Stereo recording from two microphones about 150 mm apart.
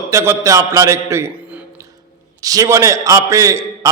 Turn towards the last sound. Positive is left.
turn(degrees=-20)  # may be behind; listen again after turning